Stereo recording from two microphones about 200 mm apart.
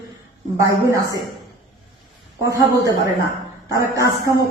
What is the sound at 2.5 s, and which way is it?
A woman's voice, 20° right (ahead or behind).